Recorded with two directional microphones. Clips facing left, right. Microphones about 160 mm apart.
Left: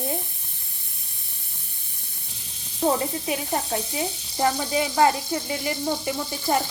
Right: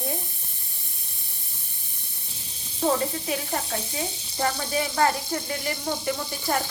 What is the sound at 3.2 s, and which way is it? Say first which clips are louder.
Sizzle: left 2 dB; 20° left (ahead or behind).